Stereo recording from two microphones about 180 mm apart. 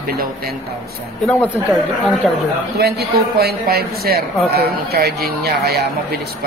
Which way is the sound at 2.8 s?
65° right (ahead or behind).